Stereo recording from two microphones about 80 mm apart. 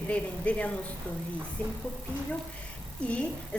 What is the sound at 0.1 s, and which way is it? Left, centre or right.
Speech, centre.